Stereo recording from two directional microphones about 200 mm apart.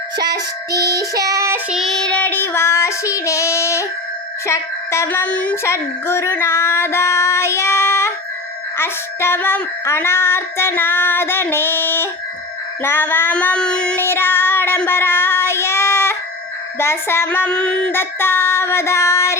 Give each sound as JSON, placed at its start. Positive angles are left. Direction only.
{"t": 0.2, "sound": "child singing", "side_deg": -20}
{"t": 1.7, "sound": "a woman's voice", "side_deg": 0}
{"t": 14.0, "sound": "child singing", "side_deg": 10}
{"t": 16.7, "sound": "a woman's voice", "side_deg": 10}